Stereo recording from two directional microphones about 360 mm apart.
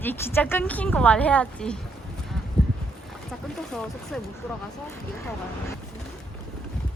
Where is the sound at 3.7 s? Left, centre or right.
Centre.